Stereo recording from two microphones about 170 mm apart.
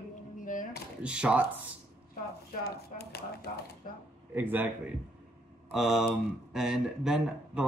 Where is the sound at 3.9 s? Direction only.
55° left (ahead or behind).